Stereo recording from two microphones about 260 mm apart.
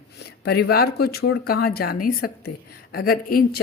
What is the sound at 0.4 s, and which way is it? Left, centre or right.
A woman's voice, left.